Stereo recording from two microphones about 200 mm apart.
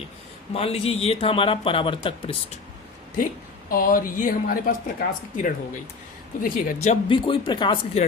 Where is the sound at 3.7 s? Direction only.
45° left (ahead or behind).